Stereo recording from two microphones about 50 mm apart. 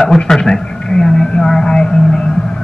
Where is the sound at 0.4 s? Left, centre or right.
Centre.